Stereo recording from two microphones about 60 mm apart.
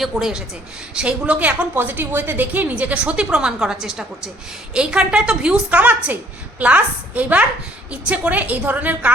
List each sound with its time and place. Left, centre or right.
0.0 s a woman's voice: centre
0.9 s a woman's voice: right